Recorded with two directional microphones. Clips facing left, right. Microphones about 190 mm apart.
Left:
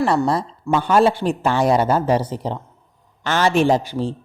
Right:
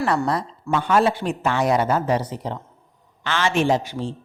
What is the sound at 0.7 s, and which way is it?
A man's voice, 30° left (ahead or behind).